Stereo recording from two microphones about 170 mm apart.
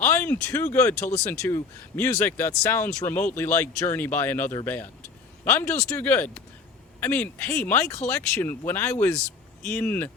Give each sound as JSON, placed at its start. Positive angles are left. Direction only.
{"t": 0.0, "sound": "speech", "side_deg": 10}
{"t": 0.9, "sound": "speech", "side_deg": 45}
{"t": 1.2, "sound": "speech", "side_deg": 10}